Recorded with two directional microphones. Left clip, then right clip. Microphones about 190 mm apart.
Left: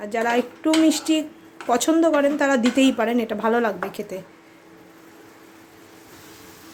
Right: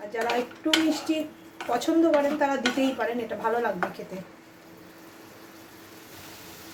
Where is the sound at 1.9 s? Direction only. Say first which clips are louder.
Left 3 dB; 75° left (ahead or behind).